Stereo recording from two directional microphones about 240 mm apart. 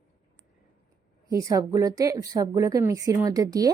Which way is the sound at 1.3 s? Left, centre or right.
Centre.